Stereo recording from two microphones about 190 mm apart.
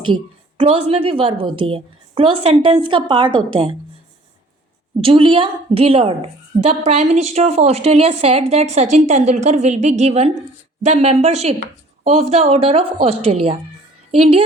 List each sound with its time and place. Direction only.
0.0 s a woman's voice: 25° right (ahead or behind)
4.9 s a woman's voice: 30° right (ahead or behind)